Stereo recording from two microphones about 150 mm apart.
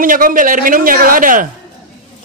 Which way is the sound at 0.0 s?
70° right (ahead or behind).